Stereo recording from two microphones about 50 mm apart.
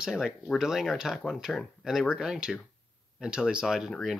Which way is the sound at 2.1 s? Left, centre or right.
Centre.